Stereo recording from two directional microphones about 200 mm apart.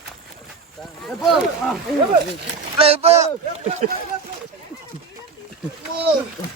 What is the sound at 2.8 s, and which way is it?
Speech, 30° right (ahead or behind).